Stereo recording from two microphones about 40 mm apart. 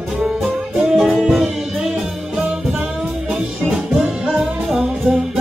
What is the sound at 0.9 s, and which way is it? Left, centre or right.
Music, centre.